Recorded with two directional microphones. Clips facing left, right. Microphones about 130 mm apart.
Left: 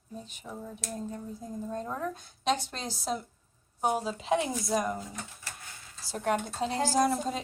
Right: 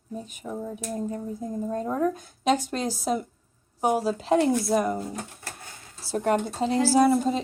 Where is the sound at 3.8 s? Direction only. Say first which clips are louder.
Right 6 dB; 5° right (ahead or behind).